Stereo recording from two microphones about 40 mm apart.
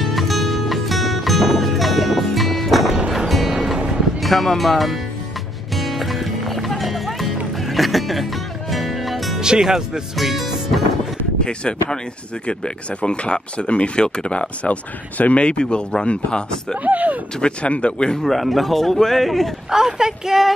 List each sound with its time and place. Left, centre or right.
0.0 s music: centre
3.5 s music: centre
4.2 s a man's voice: centre
5.8 s music: centre
9.4 s speech: centre
10.1 s music: centre
12.4 s speech: left
16.8 s speech: right
17.4 s speech: left
18.2 s a man's voice: centre
19.7 s speech: centre